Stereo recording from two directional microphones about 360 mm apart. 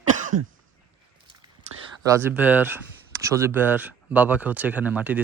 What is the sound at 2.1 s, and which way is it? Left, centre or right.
Speech, centre.